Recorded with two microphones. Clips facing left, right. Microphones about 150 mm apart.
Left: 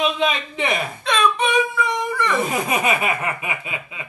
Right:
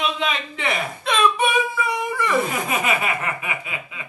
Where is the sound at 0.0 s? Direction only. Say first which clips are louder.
Left 4 dB; 20° left (ahead or behind).